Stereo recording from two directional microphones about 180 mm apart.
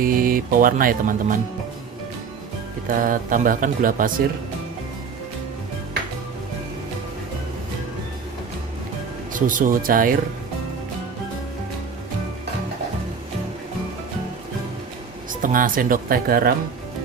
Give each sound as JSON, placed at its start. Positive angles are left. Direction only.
{"t": 0.0, "sound": "speech", "side_deg": -50}
{"t": 2.9, "sound": "speech", "side_deg": -50}
{"t": 9.3, "sound": "speech", "side_deg": -45}
{"t": 15.4, "sound": "speech", "side_deg": -50}